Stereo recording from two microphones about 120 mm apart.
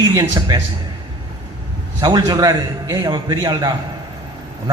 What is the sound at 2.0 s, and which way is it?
A man's voice, 40° right (ahead or behind).